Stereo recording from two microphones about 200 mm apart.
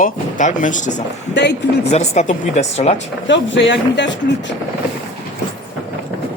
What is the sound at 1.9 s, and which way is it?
Speech, 35° left (ahead or behind).